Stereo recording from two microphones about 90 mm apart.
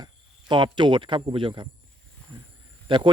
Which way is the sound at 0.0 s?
60° right (ahead or behind).